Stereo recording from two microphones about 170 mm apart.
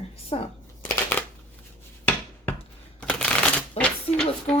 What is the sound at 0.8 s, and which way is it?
Shuffling cards, 10° left (ahead or behind).